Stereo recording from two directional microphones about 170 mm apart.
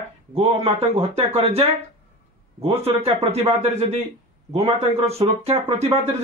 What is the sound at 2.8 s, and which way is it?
Speech, 35° right (ahead or behind).